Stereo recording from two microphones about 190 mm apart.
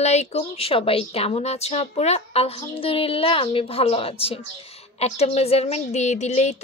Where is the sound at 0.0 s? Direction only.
35° left (ahead or behind).